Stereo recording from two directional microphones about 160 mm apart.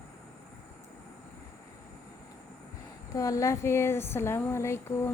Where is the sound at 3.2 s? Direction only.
20° left (ahead or behind).